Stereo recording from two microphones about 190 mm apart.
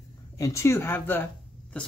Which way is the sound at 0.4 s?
15° left (ahead or behind).